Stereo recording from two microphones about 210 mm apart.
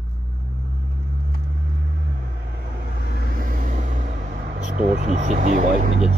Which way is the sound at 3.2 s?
40° right (ahead or behind).